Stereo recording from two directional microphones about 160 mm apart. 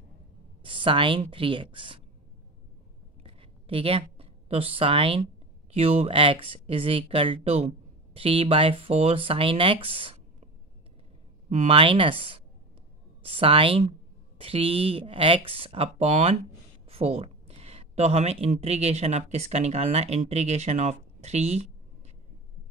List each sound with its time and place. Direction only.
0.7 s speech: 35° right (ahead or behind)
3.3 s a sound: 35° right (ahead or behind)
5.7 s speech: 40° right (ahead or behind)
11.4 s speech: 40° right (ahead or behind)